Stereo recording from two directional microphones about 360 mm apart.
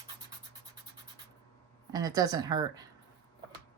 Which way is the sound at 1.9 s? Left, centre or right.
Centre.